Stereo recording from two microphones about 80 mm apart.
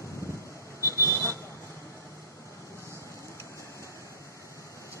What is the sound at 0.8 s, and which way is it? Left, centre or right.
Vehicle, left.